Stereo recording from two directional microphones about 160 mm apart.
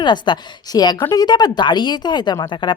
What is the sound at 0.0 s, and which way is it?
A woman's voice, 30° left (ahead or behind).